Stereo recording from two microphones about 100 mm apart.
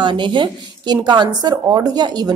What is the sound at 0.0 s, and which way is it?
A woman's voice, 55° right (ahead or behind).